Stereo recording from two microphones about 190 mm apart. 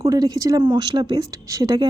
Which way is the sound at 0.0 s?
20° right (ahead or behind).